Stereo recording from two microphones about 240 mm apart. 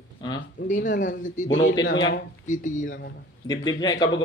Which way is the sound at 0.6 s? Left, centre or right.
Left.